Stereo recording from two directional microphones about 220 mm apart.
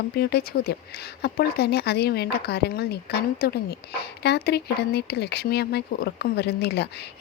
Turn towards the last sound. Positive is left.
turn(degrees=50)  # may be behind; listen again after turning